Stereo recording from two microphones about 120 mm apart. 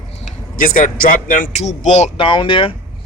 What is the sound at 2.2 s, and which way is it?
Speech, 45° left (ahead or behind).